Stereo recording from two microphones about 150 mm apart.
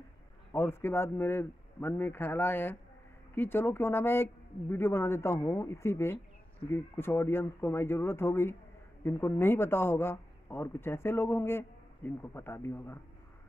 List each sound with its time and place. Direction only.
0.5 s speech: 15° left (ahead or behind)